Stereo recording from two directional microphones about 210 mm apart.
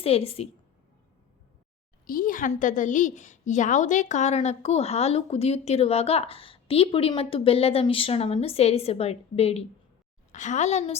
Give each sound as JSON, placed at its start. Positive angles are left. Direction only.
{"t": 0.0, "sound": "a woman's voice", "side_deg": 30}
{"t": 2.0, "sound": "a woman's voice", "side_deg": 40}